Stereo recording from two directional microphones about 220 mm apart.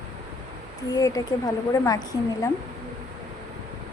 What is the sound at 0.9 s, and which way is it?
A woman's voice, 15° left (ahead or behind).